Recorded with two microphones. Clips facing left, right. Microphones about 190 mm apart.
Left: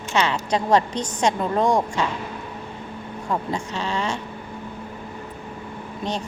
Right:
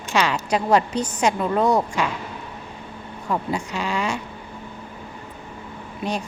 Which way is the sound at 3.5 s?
10° right (ahead or behind).